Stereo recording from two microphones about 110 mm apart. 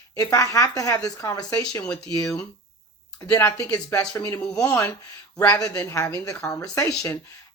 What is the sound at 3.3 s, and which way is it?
Speech, 25° left (ahead or behind).